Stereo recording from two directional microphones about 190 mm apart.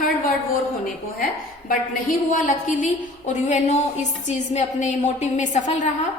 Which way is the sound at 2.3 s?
45° left (ahead or behind).